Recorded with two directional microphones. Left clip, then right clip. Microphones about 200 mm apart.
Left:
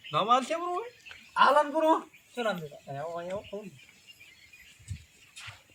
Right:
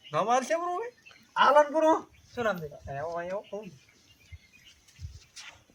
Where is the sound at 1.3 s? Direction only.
30° right (ahead or behind).